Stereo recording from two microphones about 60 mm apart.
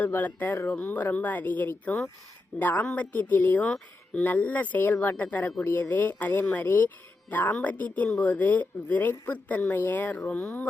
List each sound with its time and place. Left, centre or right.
0.0 s speech: left